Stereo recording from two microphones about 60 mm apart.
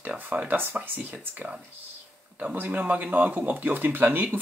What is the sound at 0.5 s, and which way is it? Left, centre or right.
Speech, right.